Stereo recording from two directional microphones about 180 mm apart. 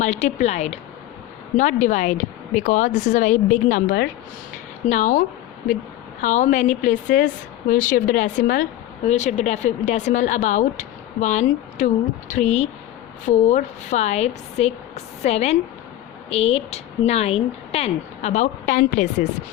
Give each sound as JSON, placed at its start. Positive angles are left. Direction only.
{"t": 0.0, "sound": "a woman's voice", "side_deg": 40}
{"t": 4.9, "sound": "a woman's voice", "side_deg": 45}
{"t": 6.2, "sound": "a woman's voice", "side_deg": 45}